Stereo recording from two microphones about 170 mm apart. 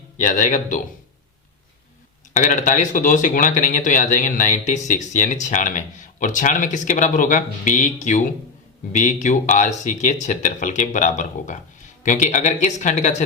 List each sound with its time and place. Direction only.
0.2 s speech: 45° left (ahead or behind)
2.3 s speech: 45° left (ahead or behind)